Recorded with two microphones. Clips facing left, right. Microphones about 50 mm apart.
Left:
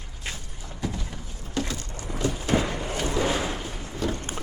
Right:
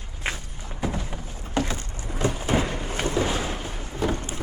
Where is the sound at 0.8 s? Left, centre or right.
Right.